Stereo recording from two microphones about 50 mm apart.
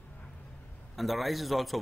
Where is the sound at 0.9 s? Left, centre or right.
Centre.